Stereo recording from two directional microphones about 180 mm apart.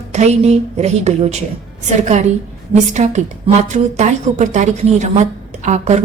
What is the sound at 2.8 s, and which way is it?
A woman's voice, 40° right (ahead or behind).